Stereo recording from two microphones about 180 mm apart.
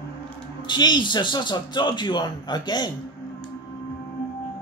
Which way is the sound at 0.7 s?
25° left (ahead or behind).